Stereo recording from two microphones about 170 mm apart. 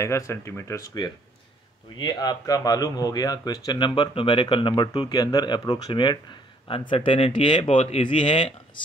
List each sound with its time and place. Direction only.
0.0 s speech: 15° left (ahead or behind)